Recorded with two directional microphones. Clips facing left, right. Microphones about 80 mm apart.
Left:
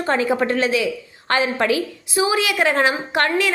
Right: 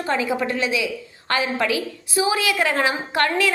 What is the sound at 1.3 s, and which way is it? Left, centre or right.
A woman's voice, left.